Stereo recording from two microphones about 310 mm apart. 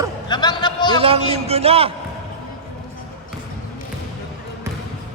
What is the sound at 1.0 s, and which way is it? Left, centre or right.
Speech, centre.